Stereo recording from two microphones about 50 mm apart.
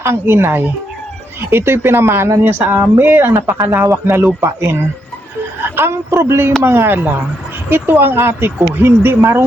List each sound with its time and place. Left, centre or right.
0.3 s speech: right
3.3 s speech: right